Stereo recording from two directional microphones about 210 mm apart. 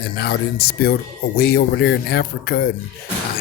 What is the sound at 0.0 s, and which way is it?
Speech, 50° left (ahead or behind).